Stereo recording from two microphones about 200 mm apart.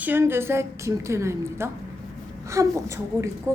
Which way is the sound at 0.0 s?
10° right (ahead or behind).